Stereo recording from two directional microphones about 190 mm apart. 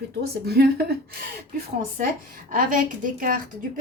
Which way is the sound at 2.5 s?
45° right (ahead or behind).